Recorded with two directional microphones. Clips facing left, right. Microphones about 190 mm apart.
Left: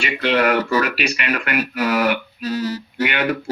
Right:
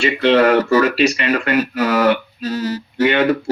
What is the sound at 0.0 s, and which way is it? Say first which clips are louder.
Speech: right 6 dB; 25° right (ahead or behind).